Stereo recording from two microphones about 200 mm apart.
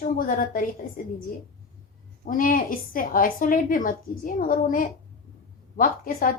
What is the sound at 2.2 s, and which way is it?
A woman's voice, 40° left (ahead or behind).